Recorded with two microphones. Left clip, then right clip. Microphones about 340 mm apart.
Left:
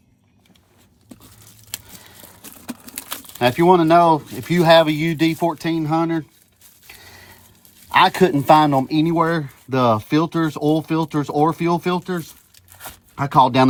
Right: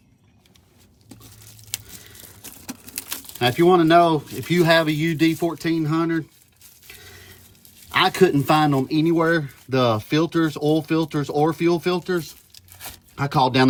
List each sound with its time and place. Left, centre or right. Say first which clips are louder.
1.7 s speech: right 1 dB; centre
6.8 s a sound: left 1 dB; centre
7.9 s speech: left 3 dB; centre